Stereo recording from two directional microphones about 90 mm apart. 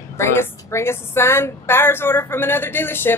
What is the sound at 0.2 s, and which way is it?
A woman's voice, 30° left (ahead or behind).